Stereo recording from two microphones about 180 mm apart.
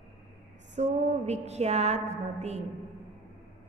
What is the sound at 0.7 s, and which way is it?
A woman's voice, 40° right (ahead or behind).